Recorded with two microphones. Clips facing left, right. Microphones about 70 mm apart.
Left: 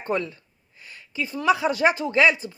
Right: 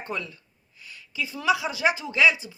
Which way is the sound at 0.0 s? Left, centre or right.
Left.